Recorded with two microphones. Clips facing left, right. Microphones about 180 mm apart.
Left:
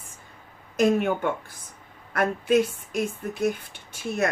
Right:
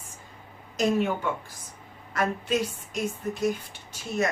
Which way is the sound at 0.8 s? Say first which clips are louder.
Left 3 dB; 55° left (ahead or behind).